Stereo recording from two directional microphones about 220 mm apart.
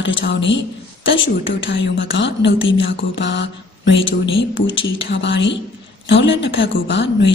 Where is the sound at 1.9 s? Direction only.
55° left (ahead or behind).